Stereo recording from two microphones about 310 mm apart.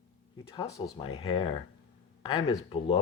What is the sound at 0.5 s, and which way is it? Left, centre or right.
Speech, centre.